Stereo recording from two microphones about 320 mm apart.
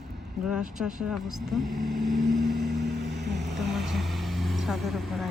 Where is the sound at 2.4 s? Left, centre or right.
Centre.